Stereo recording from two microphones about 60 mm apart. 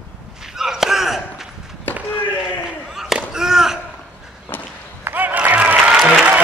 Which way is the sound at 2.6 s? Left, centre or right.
Centre.